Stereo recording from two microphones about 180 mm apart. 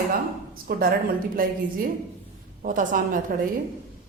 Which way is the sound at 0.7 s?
60° right (ahead or behind).